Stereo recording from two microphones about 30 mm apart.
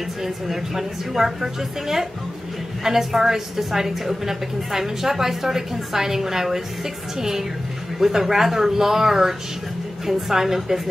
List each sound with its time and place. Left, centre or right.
0.2 s a woman's voice: centre